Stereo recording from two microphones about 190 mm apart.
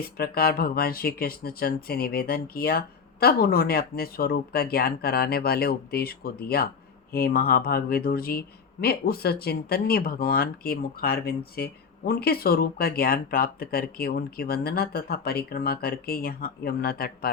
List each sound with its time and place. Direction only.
0.0 s speech: 50° left (ahead or behind)